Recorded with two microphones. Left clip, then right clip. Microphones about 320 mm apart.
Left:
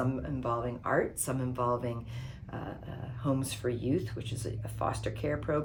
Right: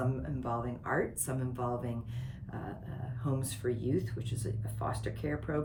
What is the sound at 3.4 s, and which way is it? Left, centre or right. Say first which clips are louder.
Speech: left 2 dB; centre.